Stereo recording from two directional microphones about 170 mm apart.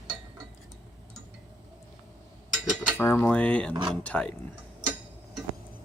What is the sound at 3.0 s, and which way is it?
Cutlery, 10° left (ahead or behind).